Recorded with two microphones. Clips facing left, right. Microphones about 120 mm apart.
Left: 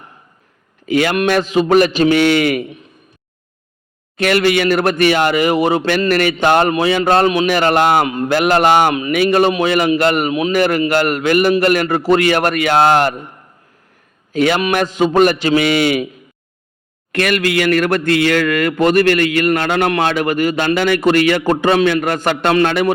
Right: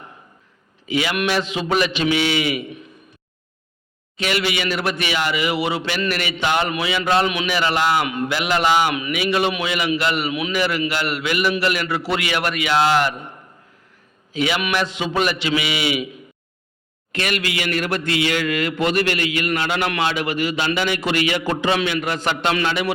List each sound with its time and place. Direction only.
0.9 s a man's voice: 50° left (ahead or behind)
4.2 s a man's voice: 50° left (ahead or behind)
8.0 s a man's voice: 35° left (ahead or behind)
9.0 s a man's voice: 35° left (ahead or behind)
14.3 s a man's voice: 50° left (ahead or behind)
17.1 s a man's voice: 55° left (ahead or behind)